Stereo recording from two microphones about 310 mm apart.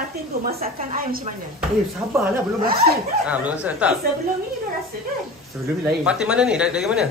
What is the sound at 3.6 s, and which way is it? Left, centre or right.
Speech, centre.